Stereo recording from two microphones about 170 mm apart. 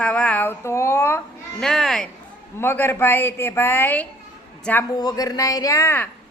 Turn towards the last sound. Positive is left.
turn(degrees=15)  # may be behind; listen again after turning